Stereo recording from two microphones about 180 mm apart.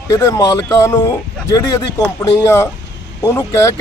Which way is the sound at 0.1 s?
20° left (ahead or behind).